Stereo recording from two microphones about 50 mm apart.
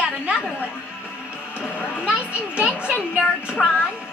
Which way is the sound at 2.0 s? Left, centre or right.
Right.